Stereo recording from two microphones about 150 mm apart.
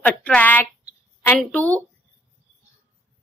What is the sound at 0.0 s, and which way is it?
Speech, 10° left (ahead or behind).